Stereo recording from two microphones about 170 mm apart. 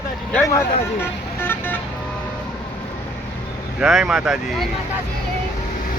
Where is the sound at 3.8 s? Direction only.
5° right (ahead or behind).